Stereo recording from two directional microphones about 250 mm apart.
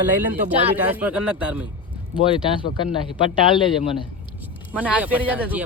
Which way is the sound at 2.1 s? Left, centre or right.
Centre.